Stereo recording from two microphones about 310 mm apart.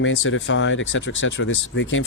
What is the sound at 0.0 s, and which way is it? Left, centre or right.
Speech, left.